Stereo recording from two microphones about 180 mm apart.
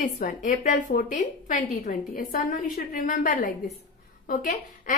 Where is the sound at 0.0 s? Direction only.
45° left (ahead or behind).